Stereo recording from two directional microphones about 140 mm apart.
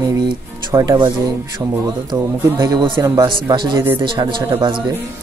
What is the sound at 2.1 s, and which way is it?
Speech, 30° right (ahead or behind).